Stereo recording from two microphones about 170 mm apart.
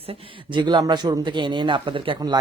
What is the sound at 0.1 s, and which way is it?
Speech, 25° right (ahead or behind).